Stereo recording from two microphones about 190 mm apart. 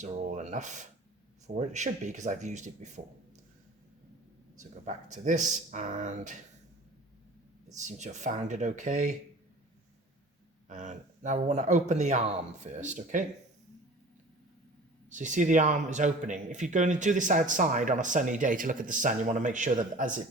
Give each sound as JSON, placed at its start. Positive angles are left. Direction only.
{"t": 0.0, "sound": "a man's voice", "side_deg": -40}
{"t": 4.7, "sound": "a man's voice", "side_deg": -40}
{"t": 7.8, "sound": "a man's voice", "side_deg": -40}
{"t": 10.7, "sound": "a man's voice", "side_deg": -40}
{"t": 15.1, "sound": "a man's voice", "side_deg": -40}